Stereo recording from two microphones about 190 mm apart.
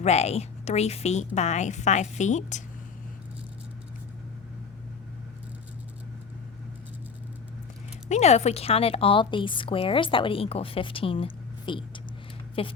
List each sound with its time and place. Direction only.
0.0 s a woman's voice: 35° left (ahead or behind)
8.1 s a woman's voice: 35° left (ahead or behind)